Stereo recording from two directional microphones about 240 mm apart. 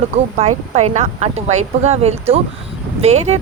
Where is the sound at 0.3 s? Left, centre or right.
Right.